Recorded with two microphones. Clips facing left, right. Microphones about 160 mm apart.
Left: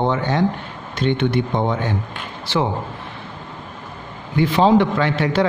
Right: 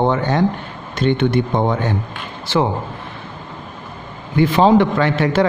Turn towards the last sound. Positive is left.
turn(degrees=-50)  # may be behind; listen again after turning